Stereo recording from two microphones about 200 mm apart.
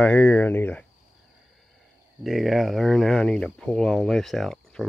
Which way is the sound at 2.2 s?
Centre (ahead or behind).